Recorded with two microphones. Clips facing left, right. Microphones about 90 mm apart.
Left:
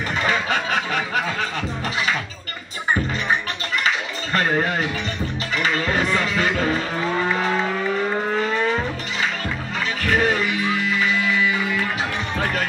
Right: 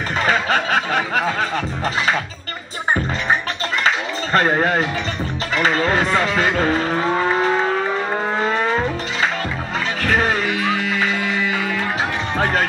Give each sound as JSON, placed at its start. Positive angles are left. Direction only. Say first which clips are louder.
{"t": 0.3, "sound": "a sound", "louder": "right 5 dB", "side_deg": -40}
{"t": 3.8, "sound": "a sound", "louder": "right 4 dB", "side_deg": -40}
{"t": 5.5, "sound": "speech", "louder": "right 5 dB", "side_deg": -35}
{"t": 7.7, "sound": "vehicle", "louder": "right 2 dB", "side_deg": -45}
{"t": 10.0, "sound": "music", "louder": "right 1 dB", "side_deg": -40}
{"t": 12.4, "sound": "speech", "louder": "right 5 dB", "side_deg": -40}